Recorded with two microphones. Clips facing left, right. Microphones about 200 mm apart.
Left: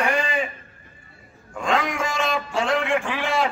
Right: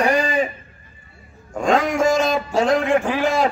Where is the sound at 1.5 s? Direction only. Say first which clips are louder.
Right 6 dB; 40° right (ahead or behind).